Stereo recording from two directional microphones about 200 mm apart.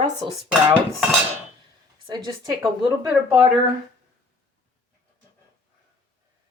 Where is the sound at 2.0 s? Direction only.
20° right (ahead or behind).